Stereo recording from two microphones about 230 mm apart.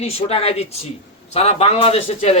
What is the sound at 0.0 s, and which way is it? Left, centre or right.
A man's voice, left.